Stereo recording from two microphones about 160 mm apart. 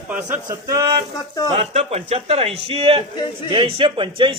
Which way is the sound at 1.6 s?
40° right (ahead or behind).